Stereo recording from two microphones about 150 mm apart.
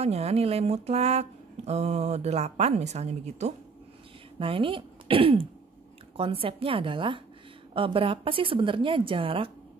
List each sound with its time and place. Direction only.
0.0 s speech: 45° right (ahead or behind)
4.4 s a woman's voice: 35° right (ahead or behind)